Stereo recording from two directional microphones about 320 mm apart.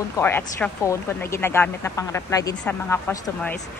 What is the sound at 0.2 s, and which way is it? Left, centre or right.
A woman's voice, centre.